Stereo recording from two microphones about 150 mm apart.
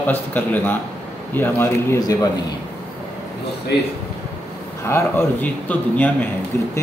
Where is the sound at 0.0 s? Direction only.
10° left (ahead or behind).